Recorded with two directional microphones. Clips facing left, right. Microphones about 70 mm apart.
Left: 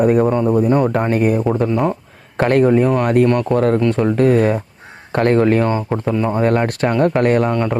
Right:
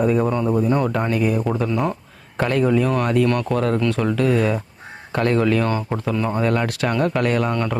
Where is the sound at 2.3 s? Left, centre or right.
Left.